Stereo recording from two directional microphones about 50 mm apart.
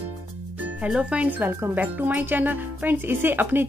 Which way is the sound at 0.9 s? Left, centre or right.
Right.